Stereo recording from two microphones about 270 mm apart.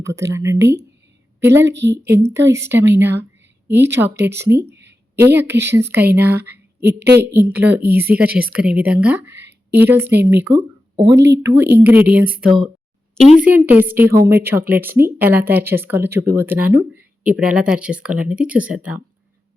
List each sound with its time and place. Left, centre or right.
0.0 s speech: centre
1.6 s a woman's voice: right
2.3 s speech: centre
4.4 s a woman's voice: right
5.1 s speech: centre
6.8 s a woman's voice: right
7.3 s speech: centre
7.8 s a woman's voice: right
8.1 s speech: centre